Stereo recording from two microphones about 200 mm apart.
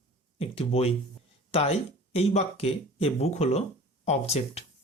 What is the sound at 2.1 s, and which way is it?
Speech, 30° left (ahead or behind).